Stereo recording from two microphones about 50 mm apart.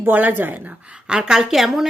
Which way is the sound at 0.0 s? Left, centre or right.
Right.